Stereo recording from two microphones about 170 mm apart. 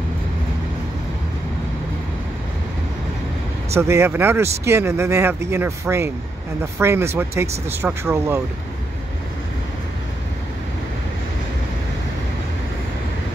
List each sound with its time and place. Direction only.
3.7 s speech: 15° right (ahead or behind)